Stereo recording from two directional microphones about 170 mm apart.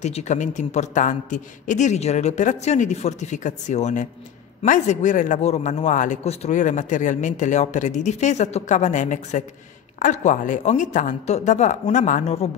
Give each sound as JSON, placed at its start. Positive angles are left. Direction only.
{"t": 0.0, "sound": "speech", "side_deg": 40}